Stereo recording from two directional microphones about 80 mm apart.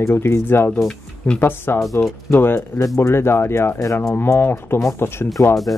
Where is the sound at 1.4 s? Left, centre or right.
Left.